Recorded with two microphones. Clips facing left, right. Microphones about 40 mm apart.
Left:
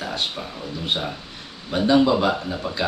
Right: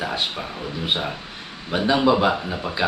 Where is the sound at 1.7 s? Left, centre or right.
Centre.